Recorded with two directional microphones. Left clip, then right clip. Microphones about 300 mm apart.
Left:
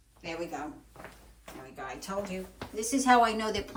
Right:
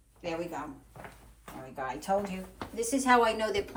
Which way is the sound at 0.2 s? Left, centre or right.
Centre.